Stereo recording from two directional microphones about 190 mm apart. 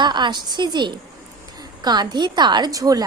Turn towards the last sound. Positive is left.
turn(degrees=-20)  # may be behind; listen again after turning